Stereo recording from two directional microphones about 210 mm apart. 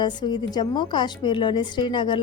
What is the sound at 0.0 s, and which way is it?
A woman's voice, 20° left (ahead or behind).